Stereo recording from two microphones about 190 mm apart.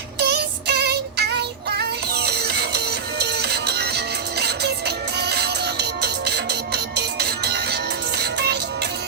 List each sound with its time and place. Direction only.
0.2 s music: 60° right (ahead or behind)